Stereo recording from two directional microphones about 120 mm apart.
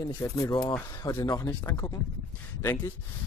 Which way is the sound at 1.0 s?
30° left (ahead or behind).